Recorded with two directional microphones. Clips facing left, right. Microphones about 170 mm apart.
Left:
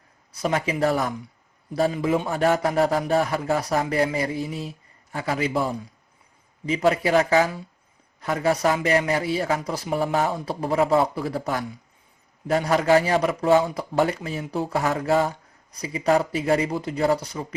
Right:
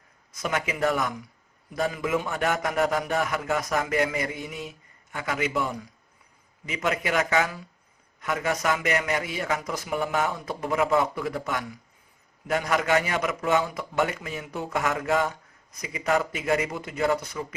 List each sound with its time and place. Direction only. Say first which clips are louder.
0.3 s a man's voice: left 4 dB; 30° left (ahead or behind)